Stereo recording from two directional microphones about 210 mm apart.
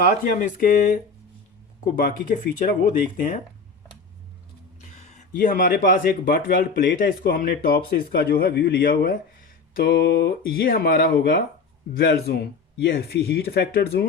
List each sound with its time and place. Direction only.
0.0 s speech: 40° left (ahead or behind)
2.0 s speech: 40° left (ahead or behind)
4.8 s speech: 35° left (ahead or behind)